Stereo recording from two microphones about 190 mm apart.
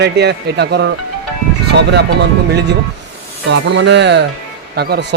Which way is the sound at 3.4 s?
65° right (ahead or behind).